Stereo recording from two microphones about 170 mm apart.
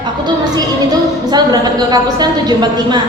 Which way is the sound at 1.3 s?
25° right (ahead or behind).